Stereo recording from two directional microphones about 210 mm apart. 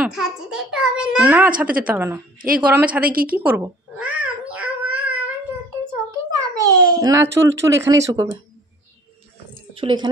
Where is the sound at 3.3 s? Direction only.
10° right (ahead or behind).